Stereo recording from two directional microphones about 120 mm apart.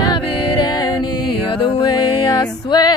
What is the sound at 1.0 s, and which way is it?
Music, 45° left (ahead or behind).